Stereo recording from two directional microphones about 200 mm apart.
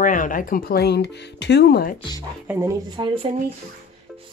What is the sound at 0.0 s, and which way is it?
Speech, 40° left (ahead or behind).